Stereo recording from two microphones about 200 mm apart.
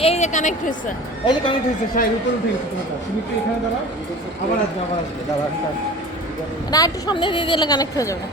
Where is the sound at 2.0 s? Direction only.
45° left (ahead or behind).